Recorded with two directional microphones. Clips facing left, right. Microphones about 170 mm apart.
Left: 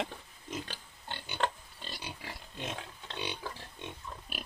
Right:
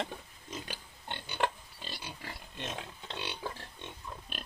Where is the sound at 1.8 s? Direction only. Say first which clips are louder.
Even; 5° right (ahead or behind).